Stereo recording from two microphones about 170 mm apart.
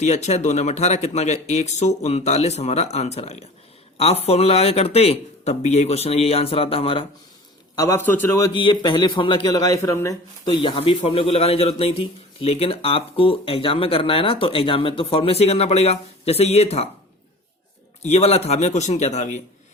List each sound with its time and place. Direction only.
0.0 s a man's voice: 45° left (ahead or behind)
7.8 s a man's voice: 15° left (ahead or behind)
8.5 s a man's voice: 30° left (ahead or behind)
10.4 s a man's voice: 30° left (ahead or behind)
18.0 s a man's voice: 40° left (ahead or behind)